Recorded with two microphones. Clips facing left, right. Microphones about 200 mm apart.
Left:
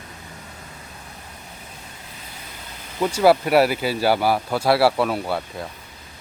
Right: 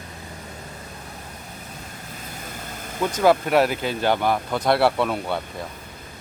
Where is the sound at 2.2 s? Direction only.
45° right (ahead or behind).